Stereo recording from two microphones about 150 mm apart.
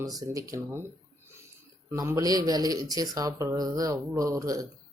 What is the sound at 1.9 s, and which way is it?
Speech, 20° right (ahead or behind).